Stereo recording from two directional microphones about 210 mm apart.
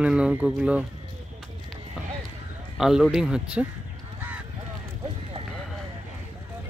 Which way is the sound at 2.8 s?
Centre (ahead or behind).